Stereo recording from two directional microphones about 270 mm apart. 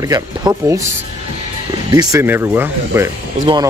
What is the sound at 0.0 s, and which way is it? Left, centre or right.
Speech, centre.